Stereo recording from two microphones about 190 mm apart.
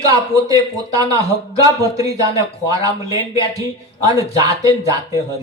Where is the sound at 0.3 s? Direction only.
20° right (ahead or behind).